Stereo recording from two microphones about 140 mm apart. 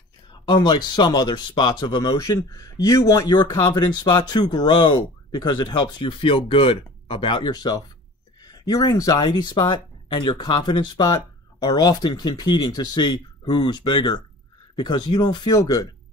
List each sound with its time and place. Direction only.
0.3 s speech: 30° left (ahead or behind)